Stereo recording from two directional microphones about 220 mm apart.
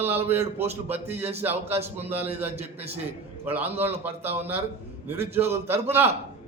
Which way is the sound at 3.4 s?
10° right (ahead or behind).